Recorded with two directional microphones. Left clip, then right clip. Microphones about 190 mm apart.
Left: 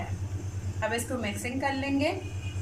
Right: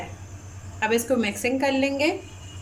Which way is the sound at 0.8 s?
55° right (ahead or behind).